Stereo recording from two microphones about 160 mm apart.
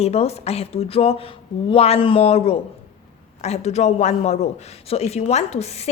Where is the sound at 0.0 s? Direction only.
40° left (ahead or behind).